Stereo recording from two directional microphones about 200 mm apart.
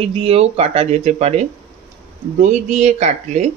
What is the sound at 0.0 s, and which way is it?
Speech, 30° right (ahead or behind).